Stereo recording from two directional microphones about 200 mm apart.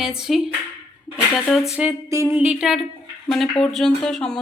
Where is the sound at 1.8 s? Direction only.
10° right (ahead or behind).